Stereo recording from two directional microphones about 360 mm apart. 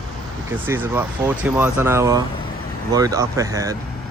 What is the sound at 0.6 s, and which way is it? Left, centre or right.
Speech, centre.